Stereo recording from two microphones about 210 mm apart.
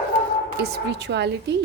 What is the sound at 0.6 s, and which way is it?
Speech, 50° right (ahead or behind).